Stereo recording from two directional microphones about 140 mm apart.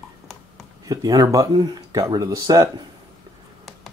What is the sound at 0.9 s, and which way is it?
Speech, 25° right (ahead or behind).